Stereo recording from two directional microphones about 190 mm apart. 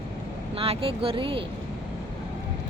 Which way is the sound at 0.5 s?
30° right (ahead or behind).